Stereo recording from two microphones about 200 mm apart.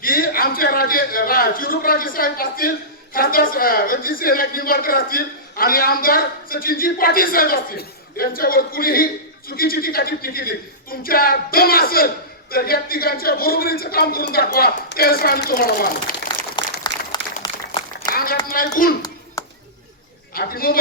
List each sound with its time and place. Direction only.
0.0 s a man's voice: 45° left (ahead or behind)
16.3 s a sound: 20° left (ahead or behind)
17.4 s applause: 20° left (ahead or behind)
18.1 s a sound: 45° left (ahead or behind)
18.4 s a man's voice: 45° left (ahead or behind)
19.4 s chop: 15° left (ahead or behind)
20.3 s a man's voice: 45° left (ahead or behind)